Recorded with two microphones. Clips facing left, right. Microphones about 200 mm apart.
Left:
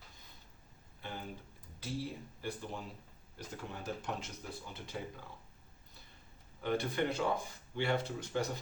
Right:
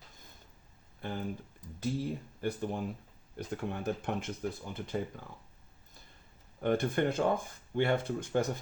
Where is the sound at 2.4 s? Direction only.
55° right (ahead or behind).